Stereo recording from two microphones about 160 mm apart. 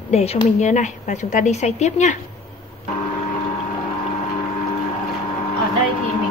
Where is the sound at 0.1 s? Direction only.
40° left (ahead or behind).